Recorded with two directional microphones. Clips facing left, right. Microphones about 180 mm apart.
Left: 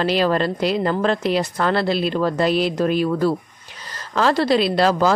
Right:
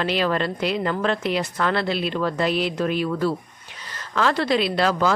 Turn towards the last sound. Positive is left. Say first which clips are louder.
# left 4 dB
turn(degrees=35)  # may be behind; listen again after turning